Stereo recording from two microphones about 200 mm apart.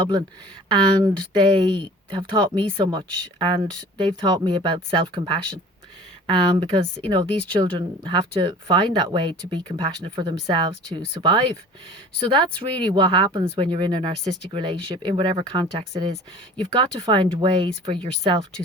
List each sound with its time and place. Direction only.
0.7 s speech: 25° right (ahead or behind)